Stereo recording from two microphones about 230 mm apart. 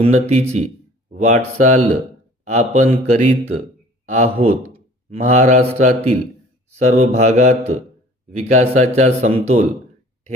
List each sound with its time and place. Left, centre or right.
0.0 s speech: right